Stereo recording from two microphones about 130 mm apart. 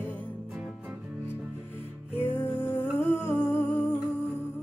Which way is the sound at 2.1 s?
20° left (ahead or behind).